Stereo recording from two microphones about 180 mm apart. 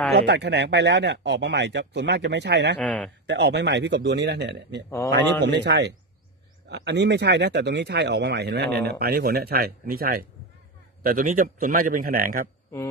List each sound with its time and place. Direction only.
0.1 s speech: 70° right (ahead or behind)
2.8 s a man's voice: 5° left (ahead or behind)
3.3 s speech: 70° right (ahead or behind)
4.8 s a man's voice: 15° left (ahead or behind)
5.1 s speech: 75° right (ahead or behind); by 12.4 s 50° right (ahead or behind)